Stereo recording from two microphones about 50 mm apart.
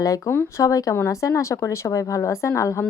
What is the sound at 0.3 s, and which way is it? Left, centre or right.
A woman's voice, left.